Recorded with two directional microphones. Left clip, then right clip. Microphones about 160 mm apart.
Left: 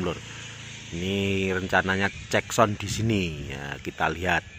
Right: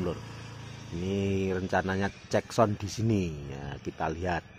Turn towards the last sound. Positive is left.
turn(degrees=10)  # may be behind; listen again after turning